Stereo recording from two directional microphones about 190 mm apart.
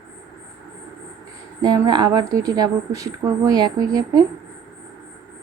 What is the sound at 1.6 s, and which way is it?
Speech, 20° right (ahead or behind).